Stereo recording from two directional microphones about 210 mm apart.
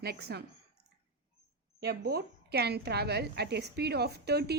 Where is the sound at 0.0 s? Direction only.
50° right (ahead or behind).